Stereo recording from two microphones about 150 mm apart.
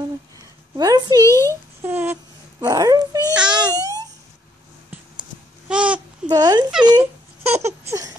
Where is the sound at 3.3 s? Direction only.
5° right (ahead or behind).